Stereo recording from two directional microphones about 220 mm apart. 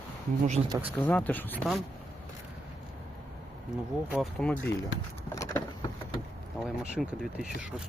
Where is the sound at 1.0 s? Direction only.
5° left (ahead or behind).